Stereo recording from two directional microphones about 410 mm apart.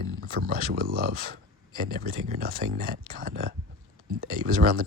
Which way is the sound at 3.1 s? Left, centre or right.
Centre.